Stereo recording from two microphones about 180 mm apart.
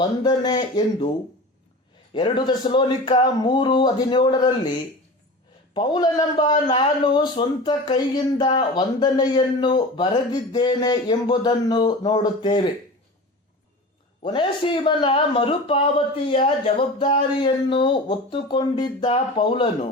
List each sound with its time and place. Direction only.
0.0 s a man's voice: 25° left (ahead or behind)
2.1 s a man's voice: 25° left (ahead or behind)
5.7 s a man's voice: 25° left (ahead or behind)
14.3 s a man's voice: 25° left (ahead or behind)